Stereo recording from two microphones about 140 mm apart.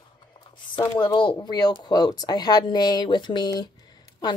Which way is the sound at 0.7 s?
30° left (ahead or behind).